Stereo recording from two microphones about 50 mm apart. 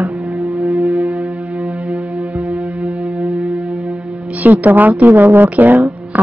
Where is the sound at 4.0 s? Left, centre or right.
Right.